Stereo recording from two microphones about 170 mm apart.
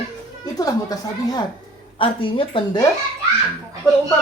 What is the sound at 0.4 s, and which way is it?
A woman's voice, 20° left (ahead or behind).